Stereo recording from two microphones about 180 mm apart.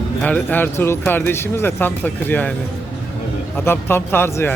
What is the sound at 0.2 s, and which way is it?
Speech, 10° left (ahead or behind).